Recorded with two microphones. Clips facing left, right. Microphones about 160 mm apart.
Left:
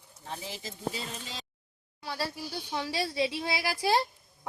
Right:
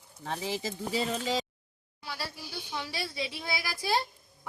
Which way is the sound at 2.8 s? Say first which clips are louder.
Left 6 dB; 35° left (ahead or behind).